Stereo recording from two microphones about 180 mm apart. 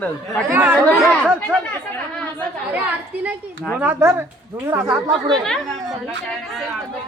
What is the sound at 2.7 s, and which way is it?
A woman's voice, 10° right (ahead or behind).